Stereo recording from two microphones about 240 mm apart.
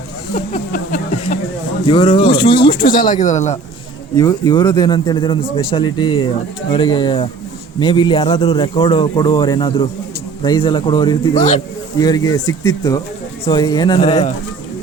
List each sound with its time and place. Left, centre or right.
0.3 s speech: left
1.9 s a man's voice: left
2.8 s speech: left
4.2 s a man's voice: centre
11.3 s speech: left
11.9 s speech: centre
14.0 s a man's voice: left